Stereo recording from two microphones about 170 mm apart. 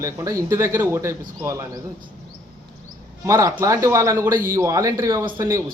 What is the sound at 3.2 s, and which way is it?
A man's voice, 15° right (ahead or behind).